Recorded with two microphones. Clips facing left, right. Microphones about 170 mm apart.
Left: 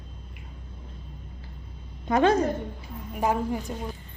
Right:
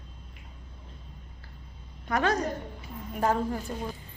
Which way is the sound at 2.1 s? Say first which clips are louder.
Left 6 dB; 25° left (ahead or behind).